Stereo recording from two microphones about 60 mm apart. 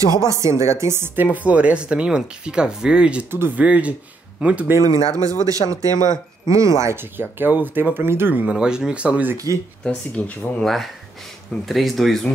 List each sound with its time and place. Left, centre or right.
0.1 s a woman's voice: right
1.1 s speech: right
3.3 s speech: right
3.5 s speech: right
5.1 s speech: right
7.2 s speech: right
8.5 s speech: centre
9.8 s speech: left
10.6 s speech: centre